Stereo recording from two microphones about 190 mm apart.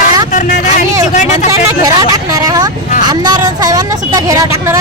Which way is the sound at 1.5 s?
20° right (ahead or behind).